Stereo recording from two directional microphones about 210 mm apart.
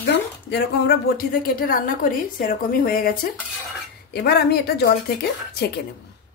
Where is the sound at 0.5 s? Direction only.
50° left (ahead or behind).